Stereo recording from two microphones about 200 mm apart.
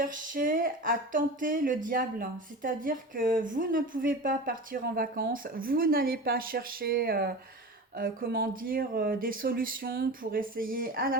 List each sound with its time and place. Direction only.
0.0 s speech: 45° right (ahead or behind)